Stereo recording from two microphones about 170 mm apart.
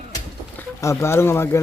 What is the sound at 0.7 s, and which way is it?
Speech, 15° left (ahead or behind).